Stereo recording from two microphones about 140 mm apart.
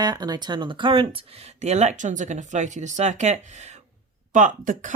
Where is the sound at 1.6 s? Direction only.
55° right (ahead or behind).